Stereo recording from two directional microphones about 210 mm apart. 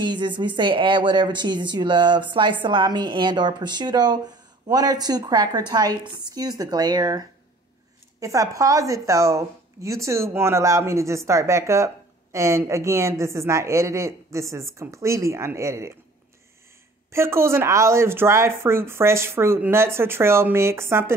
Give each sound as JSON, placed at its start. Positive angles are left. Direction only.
{"t": 0.0, "sound": "a woman's voice", "side_deg": -20}
{"t": 17.1, "sound": "a woman's voice", "side_deg": -10}